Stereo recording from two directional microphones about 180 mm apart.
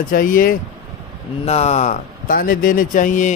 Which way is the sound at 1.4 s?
35° left (ahead or behind).